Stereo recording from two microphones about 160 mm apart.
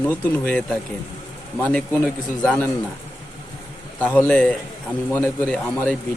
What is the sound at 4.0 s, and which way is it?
Speech, 10° left (ahead or behind).